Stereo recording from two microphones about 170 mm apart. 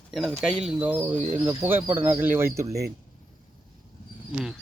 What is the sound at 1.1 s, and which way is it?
Speech, 40° right (ahead or behind).